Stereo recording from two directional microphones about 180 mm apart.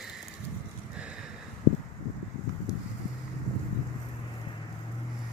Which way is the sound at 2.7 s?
20° left (ahead or behind).